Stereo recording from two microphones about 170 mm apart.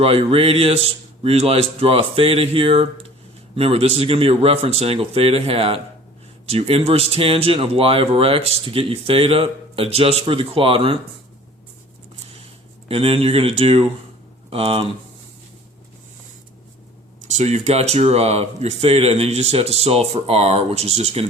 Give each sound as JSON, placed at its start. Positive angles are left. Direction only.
{"t": 0.0, "sound": "speech", "side_deg": -35}
{"t": 12.9, "sound": "speech", "side_deg": -35}
{"t": 17.2, "sound": "speech", "side_deg": -45}